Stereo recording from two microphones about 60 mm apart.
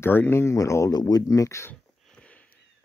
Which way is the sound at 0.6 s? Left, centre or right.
Left.